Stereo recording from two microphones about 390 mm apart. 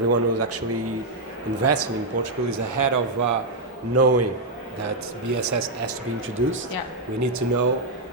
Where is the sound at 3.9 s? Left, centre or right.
Right.